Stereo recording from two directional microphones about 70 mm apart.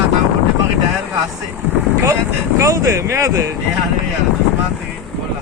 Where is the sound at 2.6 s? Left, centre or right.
Right.